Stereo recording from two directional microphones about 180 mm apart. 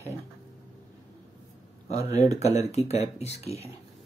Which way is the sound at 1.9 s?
35° left (ahead or behind).